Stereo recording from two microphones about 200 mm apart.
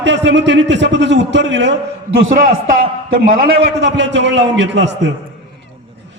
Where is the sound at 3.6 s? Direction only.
60° right (ahead or behind).